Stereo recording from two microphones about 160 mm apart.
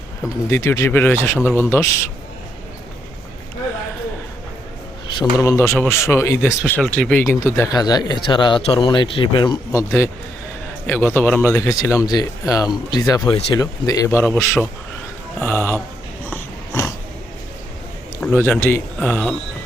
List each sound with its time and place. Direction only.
0.5 s speech: 15° left (ahead or behind)
5.2 s speech: 20° left (ahead or behind)
6.8 s speech: 5° left (ahead or behind); by 9.8 s 25° left (ahead or behind)
10.8 s speech: 10° left (ahead or behind)
16.3 s dog: 15° left (ahead or behind)
18.2 s speech: 10° left (ahead or behind)